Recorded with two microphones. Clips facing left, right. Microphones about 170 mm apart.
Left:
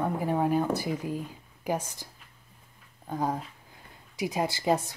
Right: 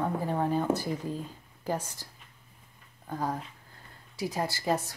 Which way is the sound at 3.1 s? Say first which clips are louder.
Left 3 dB; 15° left (ahead or behind).